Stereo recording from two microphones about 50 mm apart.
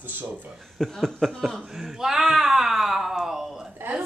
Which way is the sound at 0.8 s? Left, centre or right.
Centre.